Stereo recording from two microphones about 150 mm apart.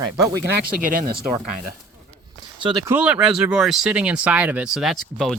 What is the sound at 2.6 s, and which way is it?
Speech, 30° right (ahead or behind).